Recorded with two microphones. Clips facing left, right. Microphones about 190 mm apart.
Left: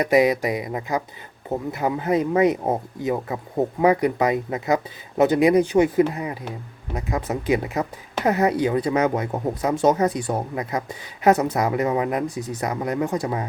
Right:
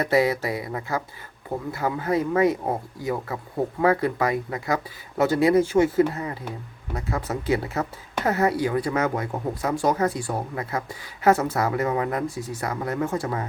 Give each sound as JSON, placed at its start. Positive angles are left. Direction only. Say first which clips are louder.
{"t": 0.0, "sound": "speech", "louder": "left 3 dB", "side_deg": 15}